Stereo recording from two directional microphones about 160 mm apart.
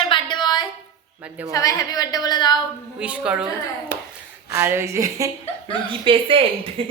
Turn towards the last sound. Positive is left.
turn(degrees=-35)  # may be behind; listen again after turning